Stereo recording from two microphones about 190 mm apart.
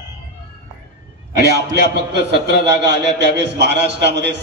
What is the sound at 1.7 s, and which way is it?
A man's voice, 65° right (ahead or behind).